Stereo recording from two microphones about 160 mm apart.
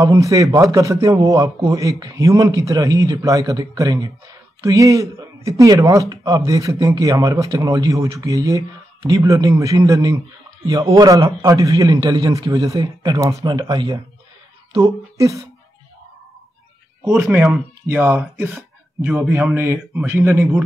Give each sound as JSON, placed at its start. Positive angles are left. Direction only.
{"t": 0.0, "sound": "speech", "side_deg": -20}
{"t": 14.7, "sound": "speech", "side_deg": -20}
{"t": 17.2, "sound": "a man's voice", "side_deg": -15}